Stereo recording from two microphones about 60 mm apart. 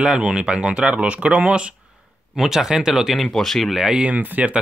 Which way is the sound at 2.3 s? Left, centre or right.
Centre.